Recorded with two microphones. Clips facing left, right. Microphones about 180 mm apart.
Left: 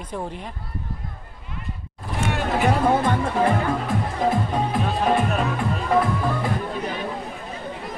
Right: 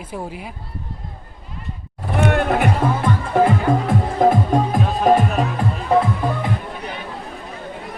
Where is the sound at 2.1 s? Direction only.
60° right (ahead or behind).